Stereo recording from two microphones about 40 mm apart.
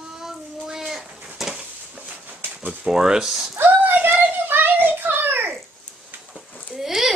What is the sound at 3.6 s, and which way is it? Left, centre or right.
Child singing, right.